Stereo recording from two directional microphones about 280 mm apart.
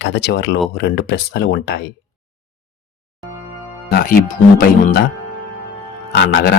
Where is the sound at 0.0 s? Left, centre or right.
Left.